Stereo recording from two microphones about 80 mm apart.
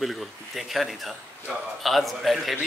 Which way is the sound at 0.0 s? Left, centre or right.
Centre.